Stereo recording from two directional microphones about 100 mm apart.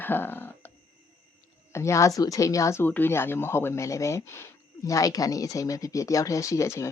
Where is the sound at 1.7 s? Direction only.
30° left (ahead or behind).